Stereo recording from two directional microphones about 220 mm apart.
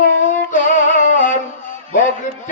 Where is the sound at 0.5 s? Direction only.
35° left (ahead or behind).